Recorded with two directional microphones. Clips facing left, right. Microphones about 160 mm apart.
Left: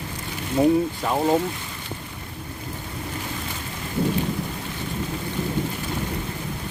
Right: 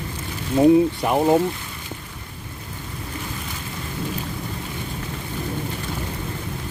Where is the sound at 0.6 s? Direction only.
5° right (ahead or behind).